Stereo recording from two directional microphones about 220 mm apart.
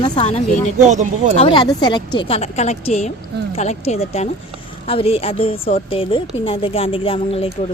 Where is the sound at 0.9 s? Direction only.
35° right (ahead or behind).